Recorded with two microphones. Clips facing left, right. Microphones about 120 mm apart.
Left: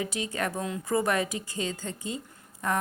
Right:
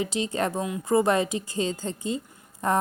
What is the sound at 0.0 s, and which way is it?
A woman's voice, 25° right (ahead or behind).